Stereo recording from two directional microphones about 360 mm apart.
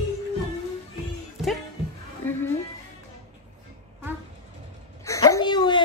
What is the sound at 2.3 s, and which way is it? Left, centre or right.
Music, centre.